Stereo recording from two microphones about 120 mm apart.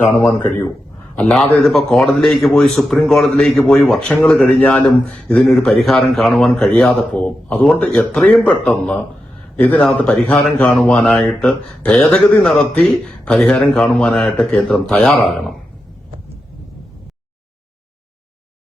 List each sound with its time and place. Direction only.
0.4 s speech: 10° left (ahead or behind)